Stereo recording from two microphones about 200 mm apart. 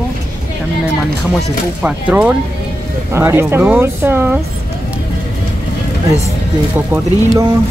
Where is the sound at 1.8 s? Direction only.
5° right (ahead or behind).